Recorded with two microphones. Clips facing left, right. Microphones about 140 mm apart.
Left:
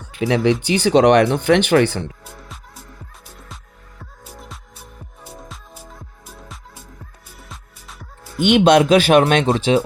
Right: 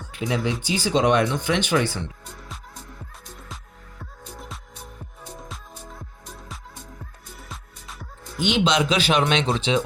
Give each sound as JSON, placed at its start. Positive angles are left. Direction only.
{"t": 0.2, "sound": "speech", "side_deg": 70}
{"t": 3.2, "sound": "music", "side_deg": 5}
{"t": 8.4, "sound": "speech", "side_deg": 60}